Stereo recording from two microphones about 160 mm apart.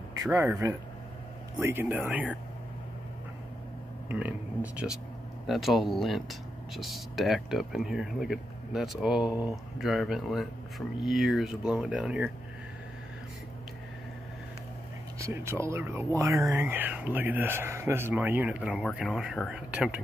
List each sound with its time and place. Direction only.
0.2 s speech: 15° right (ahead or behind)
4.1 s speech: 10° right (ahead or behind)
15.1 s speech: 20° right (ahead or behind)